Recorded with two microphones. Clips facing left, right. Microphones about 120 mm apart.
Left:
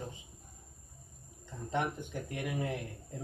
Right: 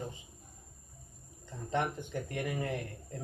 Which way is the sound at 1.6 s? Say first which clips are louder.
Right 1 dB; 5° left (ahead or behind).